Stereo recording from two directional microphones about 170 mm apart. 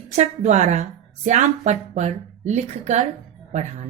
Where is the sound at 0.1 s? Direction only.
45° right (ahead or behind).